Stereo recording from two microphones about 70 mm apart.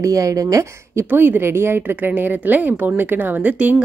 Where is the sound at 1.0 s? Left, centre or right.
Right.